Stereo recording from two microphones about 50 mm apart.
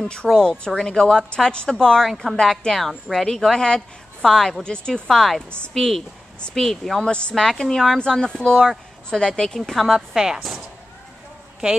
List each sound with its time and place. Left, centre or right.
0.1 s a woman's voice: centre
2.6 s a woman's voice: centre
3.1 s a woman's voice: centre
5.0 s a woman's voice: centre
7.1 s a woman's voice: left
7.3 s a woman's voice: centre
8.0 s a woman's voice: centre
9.9 s a woman's voice: centre